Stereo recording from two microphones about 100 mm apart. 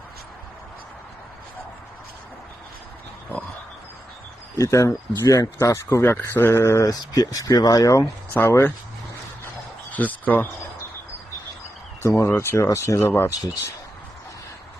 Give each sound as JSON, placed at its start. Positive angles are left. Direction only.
{"t": 4.5, "sound": "speech", "side_deg": 30}
{"t": 9.9, "sound": "speech", "side_deg": 15}
{"t": 12.0, "sound": "speech", "side_deg": 25}